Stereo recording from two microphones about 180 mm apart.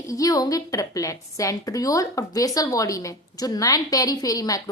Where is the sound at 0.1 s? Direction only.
20° left (ahead or behind).